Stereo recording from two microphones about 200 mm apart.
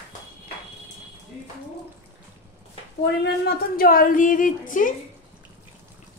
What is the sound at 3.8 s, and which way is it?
A woman's voice, 45° left (ahead or behind).